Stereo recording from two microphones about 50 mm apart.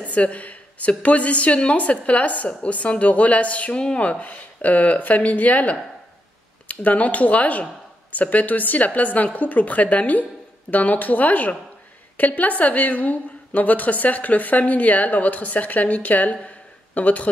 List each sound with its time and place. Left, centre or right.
0.0 s a woman's voice: left